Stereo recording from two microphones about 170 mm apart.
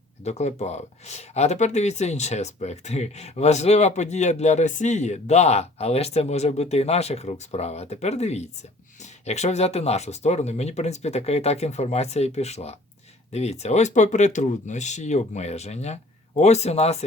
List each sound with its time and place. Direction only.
0.3 s speech: 40° left (ahead or behind)